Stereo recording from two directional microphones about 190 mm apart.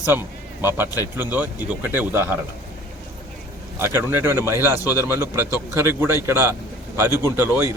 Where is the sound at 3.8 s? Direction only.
10° right (ahead or behind).